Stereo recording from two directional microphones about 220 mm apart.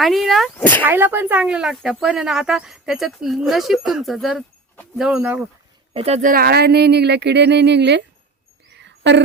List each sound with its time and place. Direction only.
0.0 s speech: centre (ahead or behind)
0.9 s speech: 10° right (ahead or behind)
5.9 s speech: 30° right (ahead or behind); by 8.0 s 50° right (ahead or behind)
8.7 s a sound: 50° right (ahead or behind)